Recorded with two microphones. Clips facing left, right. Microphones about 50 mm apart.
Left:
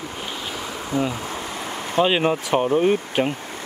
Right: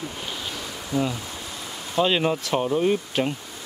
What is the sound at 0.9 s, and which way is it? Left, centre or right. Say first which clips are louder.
Speech: left 1 dB; left.